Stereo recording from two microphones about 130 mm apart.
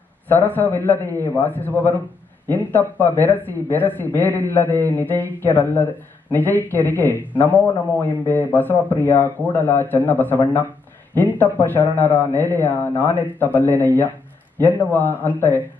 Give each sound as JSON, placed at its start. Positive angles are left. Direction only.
{"t": 0.3, "sound": "speech", "side_deg": 15}